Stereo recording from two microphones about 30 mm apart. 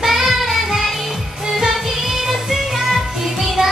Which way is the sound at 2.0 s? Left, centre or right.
Centre.